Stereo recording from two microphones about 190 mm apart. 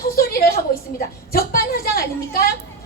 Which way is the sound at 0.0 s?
55° left (ahead or behind).